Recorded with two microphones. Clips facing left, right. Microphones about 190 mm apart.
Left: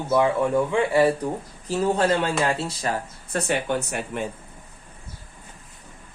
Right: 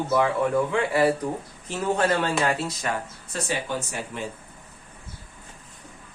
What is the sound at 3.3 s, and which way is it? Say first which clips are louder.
Speech: left 4 dB; 60° left (ahead or behind).